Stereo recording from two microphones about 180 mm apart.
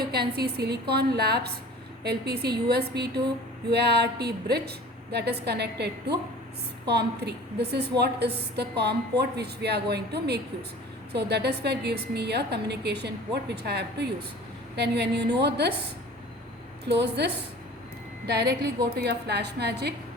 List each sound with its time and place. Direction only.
0.1 s a woman's voice: 60° right (ahead or behind)
17.0 s a woman's voice: 70° right (ahead or behind)